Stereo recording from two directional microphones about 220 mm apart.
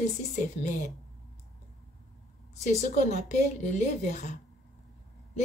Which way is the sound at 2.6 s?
30° left (ahead or behind).